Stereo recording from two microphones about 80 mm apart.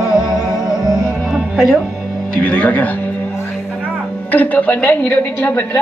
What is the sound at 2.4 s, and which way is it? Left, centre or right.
Speech, centre.